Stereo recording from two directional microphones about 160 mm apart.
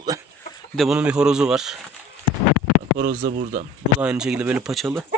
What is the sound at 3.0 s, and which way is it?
Speech, 65° right (ahead or behind).